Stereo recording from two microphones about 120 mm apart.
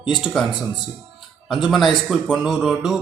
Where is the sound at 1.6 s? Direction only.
Centre (ahead or behind).